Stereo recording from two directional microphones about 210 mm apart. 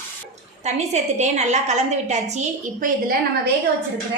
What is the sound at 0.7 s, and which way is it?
A woman's voice, 30° right (ahead or behind).